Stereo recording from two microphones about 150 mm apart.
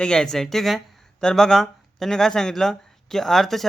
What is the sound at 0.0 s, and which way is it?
Speech, 5° left (ahead or behind).